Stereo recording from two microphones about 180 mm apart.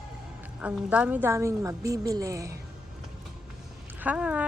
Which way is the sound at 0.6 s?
5° right (ahead or behind).